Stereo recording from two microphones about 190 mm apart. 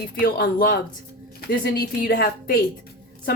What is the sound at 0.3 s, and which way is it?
Speech, 50° left (ahead or behind).